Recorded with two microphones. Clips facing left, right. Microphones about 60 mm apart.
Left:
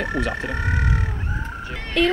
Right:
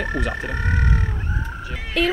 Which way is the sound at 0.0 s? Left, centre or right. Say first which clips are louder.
Left 1 dB; centre.